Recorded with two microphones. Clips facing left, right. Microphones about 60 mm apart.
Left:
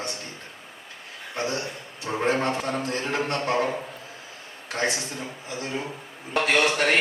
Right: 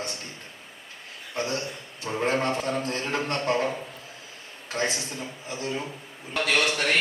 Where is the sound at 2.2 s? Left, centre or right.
Left.